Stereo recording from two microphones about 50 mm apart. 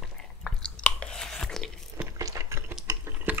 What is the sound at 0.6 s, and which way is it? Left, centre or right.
Chewing, left.